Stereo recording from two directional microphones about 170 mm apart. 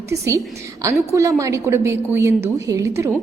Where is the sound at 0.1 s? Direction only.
20° right (ahead or behind).